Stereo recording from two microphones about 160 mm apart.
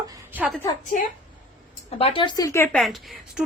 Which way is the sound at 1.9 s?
35° left (ahead or behind).